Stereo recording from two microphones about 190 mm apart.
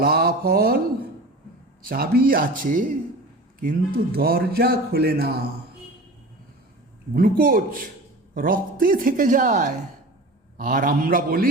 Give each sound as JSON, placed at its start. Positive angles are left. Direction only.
{"t": 0.0, "sound": "mantra", "side_deg": -55}
{"t": 1.8, "sound": "a woman's voice", "side_deg": -50}
{"t": 7.1, "sound": "a woman's voice", "side_deg": -50}